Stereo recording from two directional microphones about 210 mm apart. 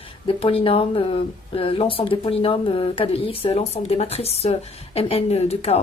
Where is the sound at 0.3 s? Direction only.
25° left (ahead or behind).